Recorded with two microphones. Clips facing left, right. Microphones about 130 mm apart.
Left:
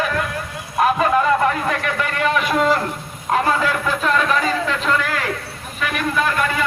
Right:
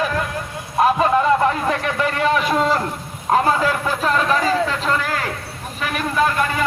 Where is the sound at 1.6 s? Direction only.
30° right (ahead or behind).